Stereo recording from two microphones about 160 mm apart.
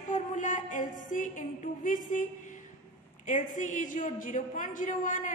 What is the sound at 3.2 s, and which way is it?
A woman's voice, 50° left (ahead or behind).